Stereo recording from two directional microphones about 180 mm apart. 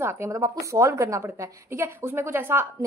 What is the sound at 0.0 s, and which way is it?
A woman's voice, 15° right (ahead or behind).